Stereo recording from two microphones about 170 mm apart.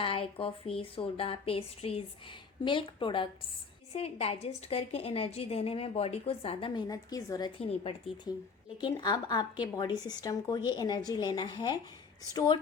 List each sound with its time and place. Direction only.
0.0 s a woman's voice: 35° left (ahead or behind)